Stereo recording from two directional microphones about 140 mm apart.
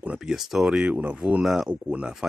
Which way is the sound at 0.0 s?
5° right (ahead or behind).